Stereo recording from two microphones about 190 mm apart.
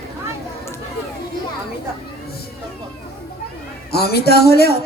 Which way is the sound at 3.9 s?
55° left (ahead or behind).